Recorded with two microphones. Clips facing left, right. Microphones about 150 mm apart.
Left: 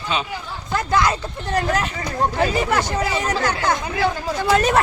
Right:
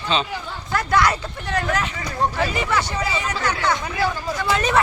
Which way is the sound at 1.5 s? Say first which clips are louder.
Left 2 dB; 35° left (ahead or behind).